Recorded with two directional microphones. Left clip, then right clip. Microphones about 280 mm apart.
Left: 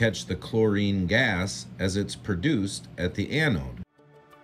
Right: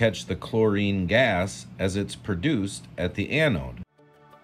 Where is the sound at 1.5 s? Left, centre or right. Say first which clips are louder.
Right 1 dB; centre.